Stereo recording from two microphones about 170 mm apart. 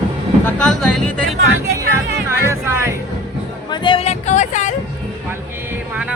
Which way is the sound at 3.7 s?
30° left (ahead or behind).